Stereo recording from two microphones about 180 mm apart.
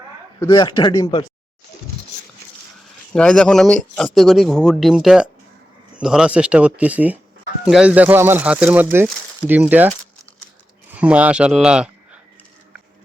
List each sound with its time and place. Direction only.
0.3 s speech: 25° left (ahead or behind)
3.1 s speech: 5° left (ahead or behind)
10.9 s speech: 5° right (ahead or behind)